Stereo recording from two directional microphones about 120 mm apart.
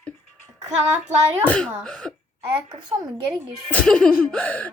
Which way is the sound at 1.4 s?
10° left (ahead or behind).